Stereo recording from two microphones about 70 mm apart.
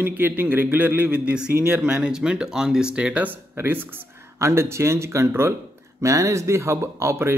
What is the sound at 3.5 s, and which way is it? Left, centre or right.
Speech, right.